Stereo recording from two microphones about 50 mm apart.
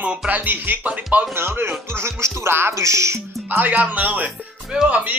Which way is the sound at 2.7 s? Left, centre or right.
Right.